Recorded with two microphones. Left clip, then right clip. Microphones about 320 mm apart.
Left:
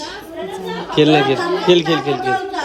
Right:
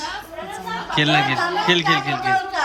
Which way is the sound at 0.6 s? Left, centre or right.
Centre.